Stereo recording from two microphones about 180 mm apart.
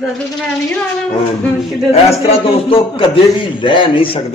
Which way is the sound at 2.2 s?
30° left (ahead or behind).